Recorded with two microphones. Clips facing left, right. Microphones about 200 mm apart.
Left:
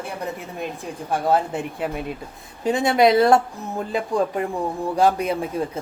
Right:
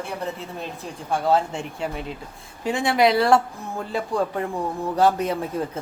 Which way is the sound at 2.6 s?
20° left (ahead or behind).